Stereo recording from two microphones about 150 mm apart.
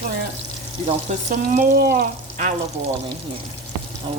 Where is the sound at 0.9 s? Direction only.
60° right (ahead or behind); by 1.9 s 75° right (ahead or behind).